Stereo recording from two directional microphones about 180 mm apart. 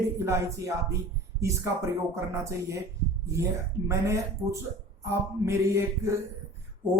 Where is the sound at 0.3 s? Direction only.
15° right (ahead or behind).